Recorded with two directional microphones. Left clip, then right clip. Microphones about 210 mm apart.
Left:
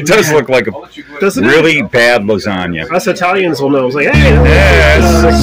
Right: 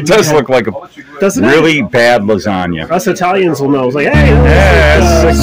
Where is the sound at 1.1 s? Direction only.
40° right (ahead or behind).